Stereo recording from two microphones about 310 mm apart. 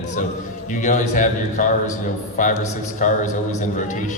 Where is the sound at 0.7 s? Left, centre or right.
Left.